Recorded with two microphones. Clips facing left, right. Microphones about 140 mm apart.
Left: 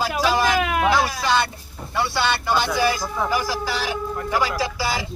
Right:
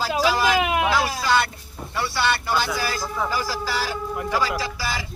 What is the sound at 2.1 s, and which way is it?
Speech, centre (ahead or behind).